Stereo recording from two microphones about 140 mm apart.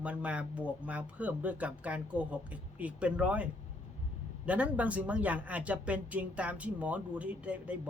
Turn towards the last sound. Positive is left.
turn(degrees=-10)  # may be behind; listen again after turning